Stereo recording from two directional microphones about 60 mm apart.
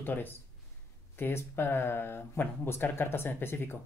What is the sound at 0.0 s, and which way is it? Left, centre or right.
Speech, left.